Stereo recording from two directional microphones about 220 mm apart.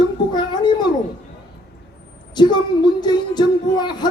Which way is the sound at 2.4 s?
20° left (ahead or behind).